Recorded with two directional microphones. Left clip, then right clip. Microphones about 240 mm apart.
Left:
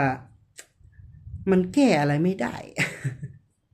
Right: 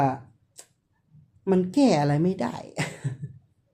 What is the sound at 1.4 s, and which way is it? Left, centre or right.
Speech, centre.